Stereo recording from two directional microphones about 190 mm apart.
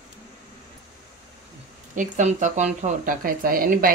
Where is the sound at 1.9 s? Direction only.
40° right (ahead or behind).